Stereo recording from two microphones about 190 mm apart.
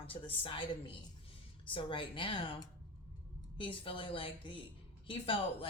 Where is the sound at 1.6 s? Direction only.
25° left (ahead or behind).